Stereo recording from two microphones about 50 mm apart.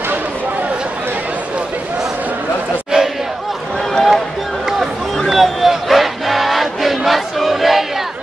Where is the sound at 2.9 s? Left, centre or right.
Centre.